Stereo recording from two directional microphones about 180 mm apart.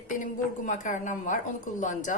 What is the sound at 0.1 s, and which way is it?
A woman's voice, 45° left (ahead or behind).